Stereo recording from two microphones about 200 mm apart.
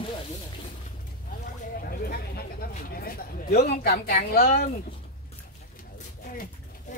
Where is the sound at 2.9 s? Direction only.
50° left (ahead or behind).